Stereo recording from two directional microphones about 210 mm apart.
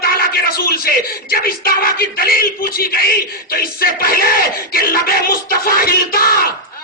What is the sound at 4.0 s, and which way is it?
Music, 45° left (ahead or behind).